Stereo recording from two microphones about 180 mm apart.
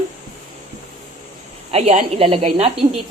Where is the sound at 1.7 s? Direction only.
35° right (ahead or behind).